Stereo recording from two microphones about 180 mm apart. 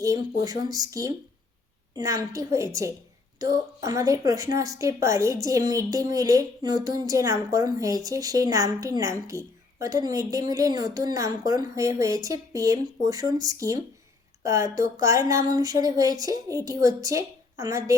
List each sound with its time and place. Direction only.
0.4 s a woman's voice: 20° right (ahead or behind)